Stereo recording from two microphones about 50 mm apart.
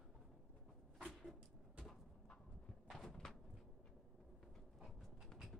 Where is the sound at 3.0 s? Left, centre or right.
Centre.